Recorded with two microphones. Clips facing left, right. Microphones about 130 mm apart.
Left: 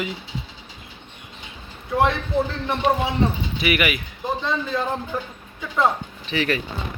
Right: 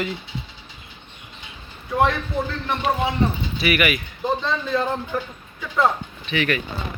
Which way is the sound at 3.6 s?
20° left (ahead or behind).